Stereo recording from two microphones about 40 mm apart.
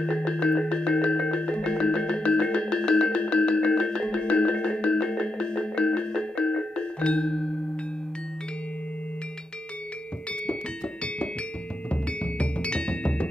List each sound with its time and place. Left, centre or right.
0.0 s music: left
11.9 s music: left